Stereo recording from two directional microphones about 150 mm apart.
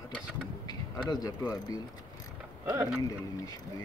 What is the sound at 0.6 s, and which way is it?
Speech, 25° left (ahead or behind).